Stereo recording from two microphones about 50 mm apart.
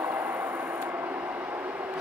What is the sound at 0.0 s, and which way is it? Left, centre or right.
Train, right.